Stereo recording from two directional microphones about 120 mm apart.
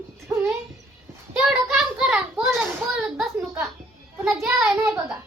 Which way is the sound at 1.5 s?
5° right (ahead or behind).